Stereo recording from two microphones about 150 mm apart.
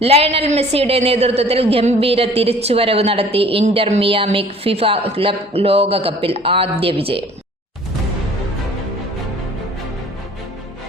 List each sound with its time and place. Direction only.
0.0 s a woman's voice: 45° right (ahead or behind)